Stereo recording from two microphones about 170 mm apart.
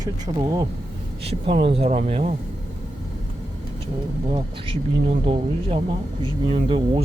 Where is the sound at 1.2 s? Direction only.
35° right (ahead or behind).